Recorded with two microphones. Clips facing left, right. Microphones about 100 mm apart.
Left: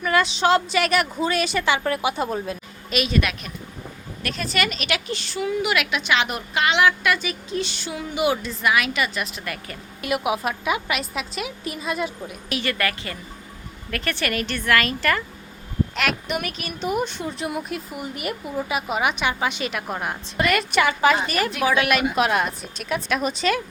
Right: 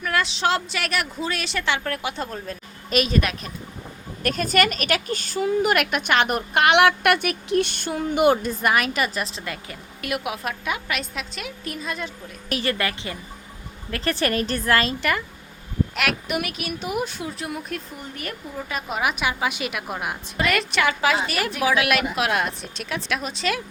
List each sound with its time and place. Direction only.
0.0 s speech: centre (ahead or behind)
2.9 s a woman's voice: 40° right (ahead or behind); by 9.7 s 20° right (ahead or behind)
10.0 s speech: centre (ahead or behind)
12.5 s a woman's voice: 40° right (ahead or behind)
12.7 s speech: 20° right (ahead or behind)
13.9 s a woman's voice: 30° right (ahead or behind)
16.0 s speech: 5° right (ahead or behind)